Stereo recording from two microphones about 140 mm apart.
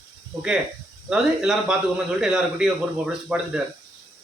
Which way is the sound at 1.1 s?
5° right (ahead or behind).